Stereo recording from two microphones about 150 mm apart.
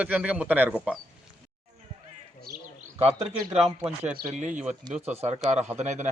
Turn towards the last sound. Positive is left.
turn(degrees=-50)  # may be behind; listen again after turning